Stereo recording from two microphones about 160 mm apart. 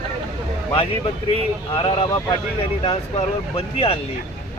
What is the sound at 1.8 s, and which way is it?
Speech, 35° left (ahead or behind).